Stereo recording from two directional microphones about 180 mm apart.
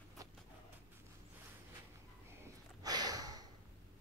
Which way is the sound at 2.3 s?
15° right (ahead or behind).